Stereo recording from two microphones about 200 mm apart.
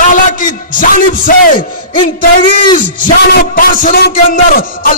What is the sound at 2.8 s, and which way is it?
A man's voice, 45° left (ahead or behind).